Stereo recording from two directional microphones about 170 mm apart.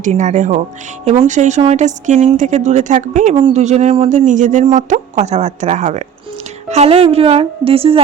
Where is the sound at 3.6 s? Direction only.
40° right (ahead or behind).